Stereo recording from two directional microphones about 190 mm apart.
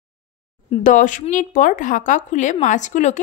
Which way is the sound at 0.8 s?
45° left (ahead or behind).